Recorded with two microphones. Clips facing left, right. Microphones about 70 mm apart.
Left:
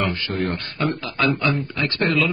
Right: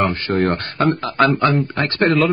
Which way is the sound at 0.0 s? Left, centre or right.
Right.